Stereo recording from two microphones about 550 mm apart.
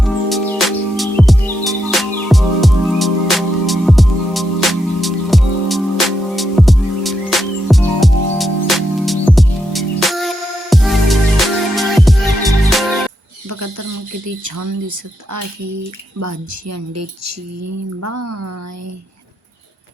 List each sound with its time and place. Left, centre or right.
0.0 s music: centre
13.5 s a sound: right
14.3 s speech: right